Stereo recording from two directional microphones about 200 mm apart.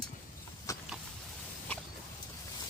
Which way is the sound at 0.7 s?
15° left (ahead or behind).